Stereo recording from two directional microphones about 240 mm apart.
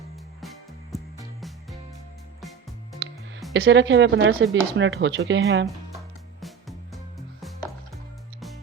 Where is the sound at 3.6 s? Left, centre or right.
Right.